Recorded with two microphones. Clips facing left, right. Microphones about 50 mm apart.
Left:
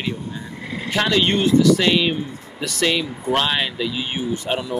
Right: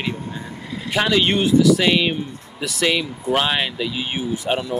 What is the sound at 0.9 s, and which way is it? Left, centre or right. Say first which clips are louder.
Speech: right 1 dB; centre.